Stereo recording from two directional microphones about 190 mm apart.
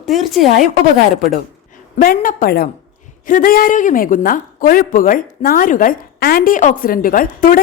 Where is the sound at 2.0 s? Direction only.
50° left (ahead or behind).